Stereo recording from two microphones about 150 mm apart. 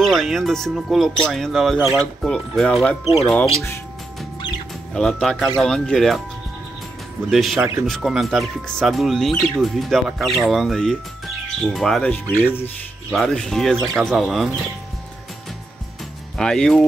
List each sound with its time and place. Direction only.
0.0 s speech: centre (ahead or behind)
4.9 s speech: 5° left (ahead or behind)
7.2 s speech: centre (ahead or behind)
13.1 s speech: centre (ahead or behind)
16.3 s speech: 5° left (ahead or behind)